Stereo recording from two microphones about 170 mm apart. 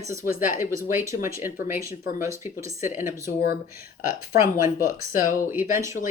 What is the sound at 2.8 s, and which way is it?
Speech, 15° right (ahead or behind).